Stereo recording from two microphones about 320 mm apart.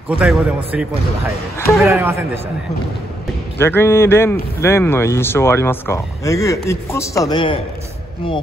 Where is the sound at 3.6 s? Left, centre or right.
Centre.